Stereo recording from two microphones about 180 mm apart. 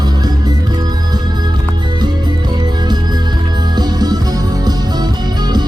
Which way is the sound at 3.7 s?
20° right (ahead or behind).